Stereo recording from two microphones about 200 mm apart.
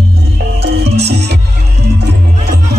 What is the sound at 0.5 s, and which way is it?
Music, 55° right (ahead or behind).